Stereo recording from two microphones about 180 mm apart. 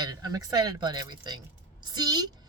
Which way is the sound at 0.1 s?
20° right (ahead or behind).